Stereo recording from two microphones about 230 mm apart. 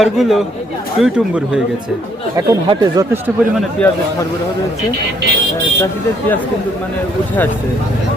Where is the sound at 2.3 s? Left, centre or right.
Centre.